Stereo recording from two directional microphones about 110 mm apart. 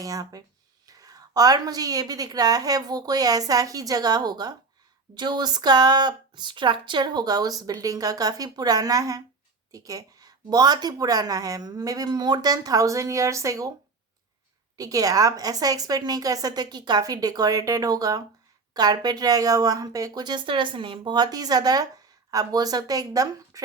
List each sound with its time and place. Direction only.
0.0 s speech: 30° right (ahead or behind)
14.8 s speech: 30° right (ahead or behind)